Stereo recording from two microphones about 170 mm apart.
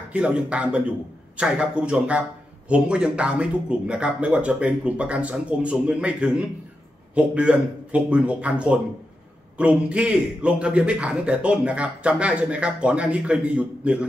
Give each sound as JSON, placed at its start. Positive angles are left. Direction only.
{"t": 0.1, "sound": "a man's voice", "side_deg": -5}